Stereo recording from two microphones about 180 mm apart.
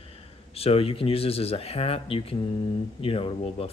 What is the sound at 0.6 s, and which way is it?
A man's voice, 30° left (ahead or behind).